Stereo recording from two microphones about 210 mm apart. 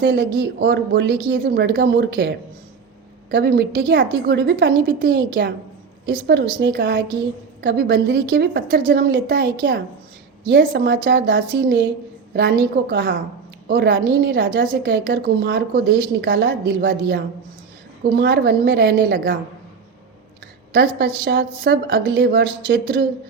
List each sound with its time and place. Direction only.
0.0 s a woman's voice: 50° right (ahead or behind)
10.8 s a woman's voice: 45° right (ahead or behind)
20.7 s a woman's voice: 45° right (ahead or behind)